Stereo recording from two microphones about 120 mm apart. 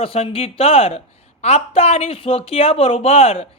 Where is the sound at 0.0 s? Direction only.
55° left (ahead or behind).